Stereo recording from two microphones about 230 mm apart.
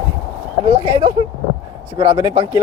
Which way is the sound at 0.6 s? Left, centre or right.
Right.